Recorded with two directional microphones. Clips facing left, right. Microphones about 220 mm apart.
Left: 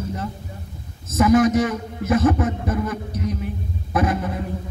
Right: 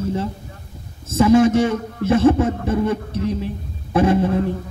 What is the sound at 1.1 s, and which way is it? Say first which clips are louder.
A man's voice: right 3 dB; 30° right (ahead or behind).